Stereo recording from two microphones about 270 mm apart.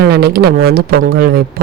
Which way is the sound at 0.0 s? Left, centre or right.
Right.